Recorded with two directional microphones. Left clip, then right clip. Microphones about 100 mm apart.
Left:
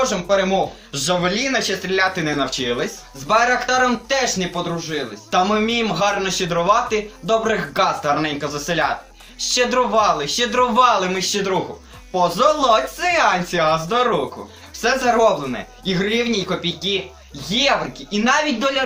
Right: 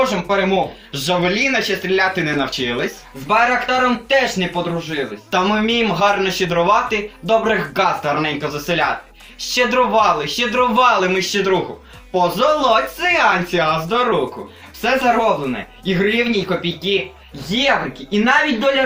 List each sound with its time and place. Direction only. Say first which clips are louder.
0.0 s speech: right 1 dB; 40° left (ahead or behind)
5.3 s speech: even; 40° left (ahead or behind)
18.1 s speech: right 3 dB; 35° left (ahead or behind)